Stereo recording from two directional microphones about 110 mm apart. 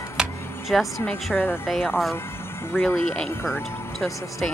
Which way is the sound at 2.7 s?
20° left (ahead or behind).